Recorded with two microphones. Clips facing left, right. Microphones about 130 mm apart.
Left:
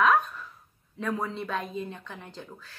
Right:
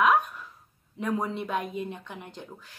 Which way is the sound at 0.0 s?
15° right (ahead or behind).